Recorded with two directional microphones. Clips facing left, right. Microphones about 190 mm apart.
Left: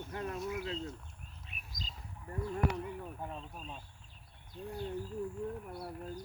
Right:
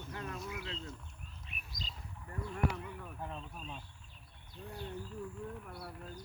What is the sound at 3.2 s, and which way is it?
Speech, 5° left (ahead or behind).